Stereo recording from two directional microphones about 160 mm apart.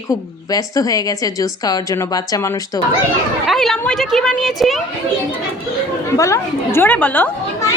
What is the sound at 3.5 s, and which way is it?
A woman's voice, centre (ahead or behind).